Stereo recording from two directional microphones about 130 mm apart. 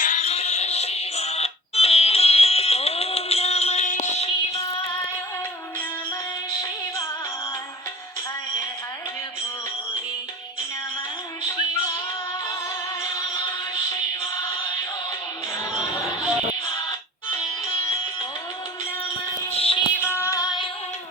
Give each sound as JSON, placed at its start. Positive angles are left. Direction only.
{"t": 0.0, "sound": "music", "side_deg": 60}
{"t": 19.5, "sound": "synthetic singing", "side_deg": 50}
{"t": 20.1, "sound": "female singing", "side_deg": 20}